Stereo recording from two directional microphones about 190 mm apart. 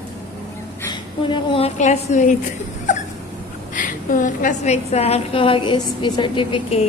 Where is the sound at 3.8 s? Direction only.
45° left (ahead or behind).